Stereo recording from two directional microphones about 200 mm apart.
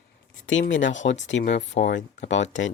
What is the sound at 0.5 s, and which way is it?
Speech, 65° left (ahead or behind).